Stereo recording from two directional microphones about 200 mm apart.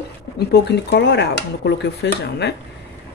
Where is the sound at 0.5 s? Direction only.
60° left (ahead or behind).